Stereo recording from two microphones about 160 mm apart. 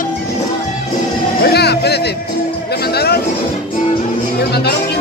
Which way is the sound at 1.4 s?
90° left.